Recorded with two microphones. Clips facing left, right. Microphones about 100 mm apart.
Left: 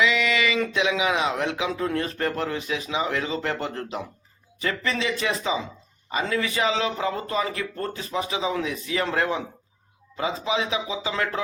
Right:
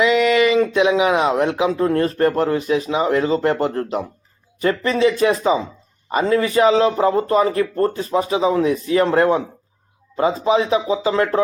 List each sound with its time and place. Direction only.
0.0 s speech: 45° right (ahead or behind)